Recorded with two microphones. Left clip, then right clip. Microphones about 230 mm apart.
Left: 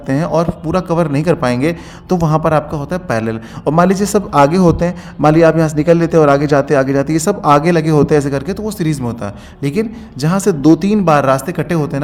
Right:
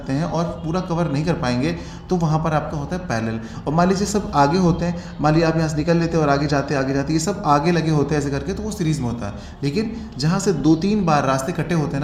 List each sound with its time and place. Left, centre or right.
0.1 s a man's voice: left